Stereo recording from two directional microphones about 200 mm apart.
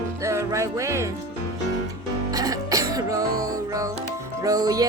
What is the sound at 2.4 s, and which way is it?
Music, 15° right (ahead or behind).